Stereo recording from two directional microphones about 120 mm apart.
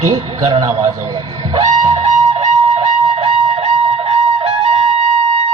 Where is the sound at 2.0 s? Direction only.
65° right (ahead or behind).